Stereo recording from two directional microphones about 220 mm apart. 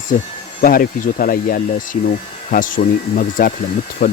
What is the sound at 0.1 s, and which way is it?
Speech, 40° left (ahead or behind).